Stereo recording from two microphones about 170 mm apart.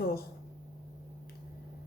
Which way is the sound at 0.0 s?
65° left (ahead or behind).